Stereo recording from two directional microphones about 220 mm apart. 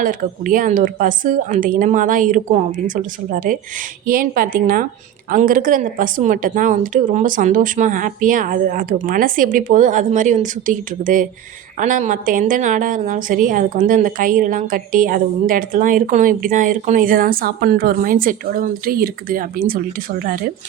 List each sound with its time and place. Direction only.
0.0 s a woman's voice: 40° right (ahead or behind)